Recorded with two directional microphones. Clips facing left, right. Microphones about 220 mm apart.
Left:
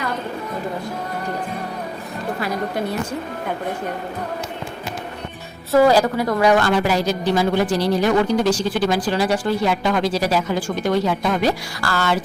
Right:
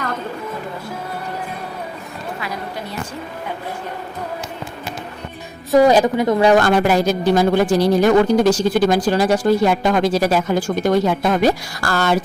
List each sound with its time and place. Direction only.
5.7 s a woman's voice: 20° right (ahead or behind)
6.6 s speech: 50° right (ahead or behind)